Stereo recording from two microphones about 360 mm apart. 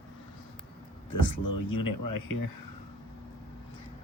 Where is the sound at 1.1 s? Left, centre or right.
Left.